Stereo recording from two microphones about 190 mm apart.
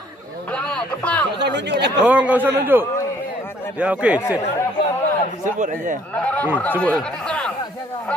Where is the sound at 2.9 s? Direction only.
15° left (ahead or behind).